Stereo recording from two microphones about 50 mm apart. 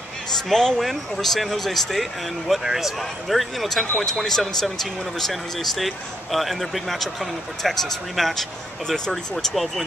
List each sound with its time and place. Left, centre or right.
0.5 s speech: centre